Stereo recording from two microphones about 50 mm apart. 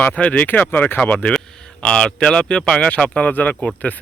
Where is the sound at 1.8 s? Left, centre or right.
Centre.